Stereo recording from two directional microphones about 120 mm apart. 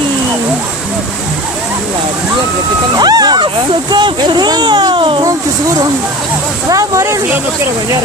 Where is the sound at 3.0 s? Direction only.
35° right (ahead or behind).